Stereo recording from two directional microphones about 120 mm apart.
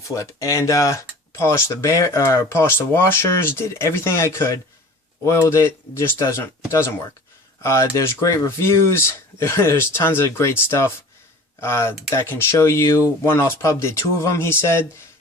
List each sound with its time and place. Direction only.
0.1 s speech: 25° left (ahead or behind)